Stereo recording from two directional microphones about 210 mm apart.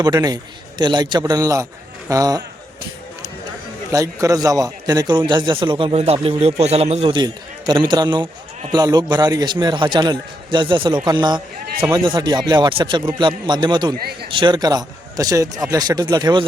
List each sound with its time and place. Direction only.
0.0 s a man's voice: 20° right (ahead or behind)
3.9 s a man's voice: 15° right (ahead or behind)
14.0 s a man's voice: 50° right (ahead or behind)
14.3 s a man's voice: 25° right (ahead or behind)